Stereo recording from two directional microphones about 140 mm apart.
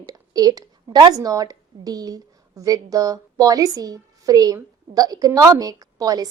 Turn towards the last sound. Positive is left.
turn(degrees=-25)  # may be behind; listen again after turning